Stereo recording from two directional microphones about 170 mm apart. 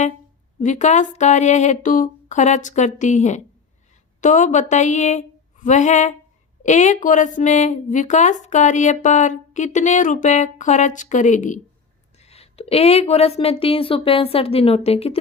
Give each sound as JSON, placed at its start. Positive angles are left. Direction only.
{"t": 0.6, "sound": "a woman's voice", "side_deg": 45}